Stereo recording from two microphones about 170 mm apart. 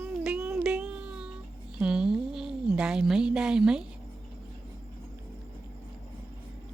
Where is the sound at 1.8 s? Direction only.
5° right (ahead or behind).